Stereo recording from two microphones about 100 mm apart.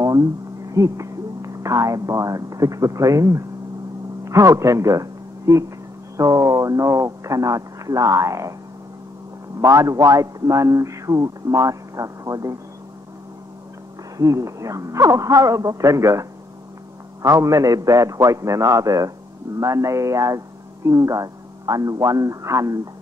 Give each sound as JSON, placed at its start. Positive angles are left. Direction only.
{"t": 0.0, "sound": "speech", "side_deg": -35}
{"t": 9.6, "sound": "speech", "side_deg": -30}
{"t": 14.1, "sound": "speech", "side_deg": -35}